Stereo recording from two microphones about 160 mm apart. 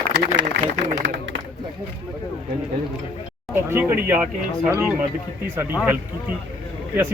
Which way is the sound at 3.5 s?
15° right (ahead or behind).